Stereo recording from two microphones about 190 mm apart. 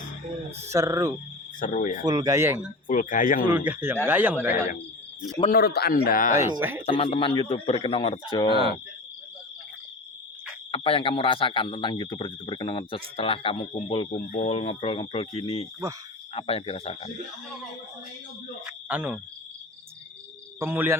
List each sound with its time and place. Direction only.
0.7 s speech: 15° right (ahead or behind)
1.5 s speech: 45° left (ahead or behind)
2.0 s speech: 20° right (ahead or behind)
2.8 s speech: 45° left (ahead or behind)
3.4 s speech: 10° right (ahead or behind)
4.5 s speech: 45° left (ahead or behind)
5.5 s speech: 55° left (ahead or behind)
6.5 s speech: 10° right (ahead or behind)
6.8 s speech: 30° left (ahead or behind)
10.7 s speech: 30° left (ahead or behind)
18.6 s speech: 5° right (ahead or behind)
20.6 s speech: 10° right (ahead or behind)